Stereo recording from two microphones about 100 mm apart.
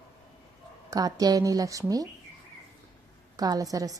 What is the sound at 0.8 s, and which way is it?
A woman's voice, 40° right (ahead or behind).